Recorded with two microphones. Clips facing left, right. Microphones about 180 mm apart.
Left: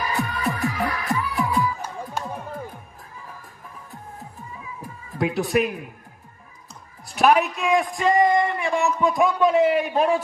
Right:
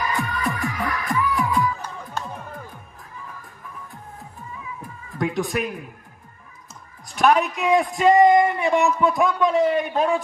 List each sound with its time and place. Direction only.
0.3 s music: 25° left (ahead or behind)
1.5 s music: 10° left (ahead or behind)
5.1 s a man's voice: 10° left (ahead or behind)
7.2 s a man's voice: 5° left (ahead or behind)
7.6 s a man's voice: 25° right (ahead or behind)
9.0 s a man's voice: 5° right (ahead or behind)